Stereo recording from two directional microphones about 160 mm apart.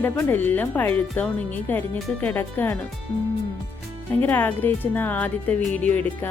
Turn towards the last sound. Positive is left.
turn(degrees=10)  # may be behind; listen again after turning